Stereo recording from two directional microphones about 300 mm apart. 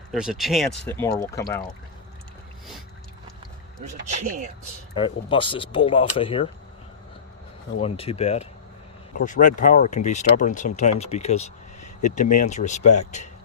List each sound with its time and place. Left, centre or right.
0.1 s speech: centre
4.9 s speech: centre
7.8 s speech: centre